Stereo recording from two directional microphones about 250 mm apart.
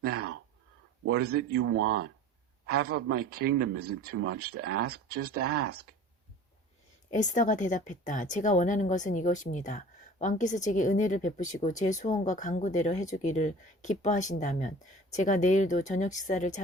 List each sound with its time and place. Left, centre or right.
0.0 s a sound: right
1.4 s speech: right
1.7 s speech: right
2.6 s speech: right
3.8 s speech: right
4.6 s speech: right
7.1 s speech: left